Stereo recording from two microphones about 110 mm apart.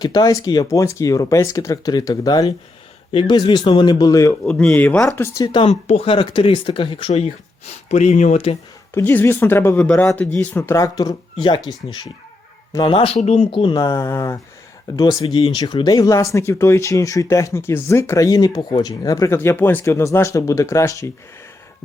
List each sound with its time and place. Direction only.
0.0 s speech: 35° left (ahead or behind)
3.1 s speech: 50° left (ahead or behind)
3.3 s speech: 40° left (ahead or behind)
4.4 s speech: 10° left (ahead or behind); by 5.5 s 25° left (ahead or behind)
5.6 s speech: 70° left (ahead or behind); by 7.1 s 50° left (ahead or behind)
7.9 s speech: 90° left
9.0 s speech: 20° left (ahead or behind); by 12.1 s 40° left (ahead or behind)
12.9 s speech: 55° left (ahead or behind)
13.1 s speech: 90° left
13.5 s speech: 50° left (ahead or behind)
13.7 s speech: 25° left (ahead or behind)
14.9 s speech: 40° left (ahead or behind)